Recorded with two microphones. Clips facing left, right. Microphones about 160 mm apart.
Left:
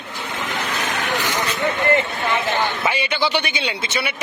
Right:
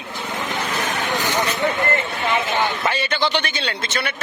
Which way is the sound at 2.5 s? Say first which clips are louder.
Even; 10° left (ahead or behind).